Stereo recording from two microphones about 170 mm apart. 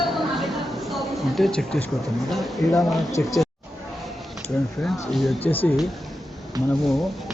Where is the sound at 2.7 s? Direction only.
20° left (ahead or behind).